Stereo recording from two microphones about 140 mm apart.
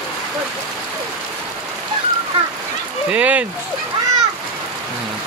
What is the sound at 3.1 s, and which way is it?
Speech, 10° right (ahead or behind).